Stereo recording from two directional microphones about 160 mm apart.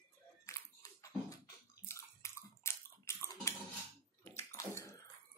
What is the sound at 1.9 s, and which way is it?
Bathtub, 15° left (ahead or behind).